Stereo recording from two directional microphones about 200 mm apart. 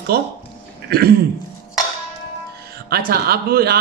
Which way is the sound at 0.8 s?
50° right (ahead or behind).